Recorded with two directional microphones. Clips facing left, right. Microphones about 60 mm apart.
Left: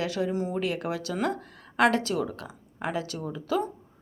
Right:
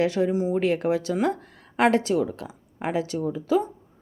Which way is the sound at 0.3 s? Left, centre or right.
Centre.